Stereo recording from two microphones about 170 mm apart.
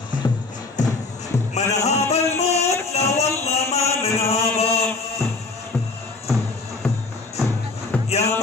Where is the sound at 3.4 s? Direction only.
40° left (ahead or behind).